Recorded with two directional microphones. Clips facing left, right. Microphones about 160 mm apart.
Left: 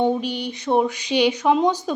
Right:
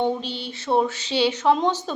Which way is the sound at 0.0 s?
15° left (ahead or behind).